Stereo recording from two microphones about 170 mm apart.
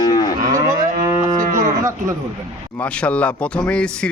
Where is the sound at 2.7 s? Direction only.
5° left (ahead or behind).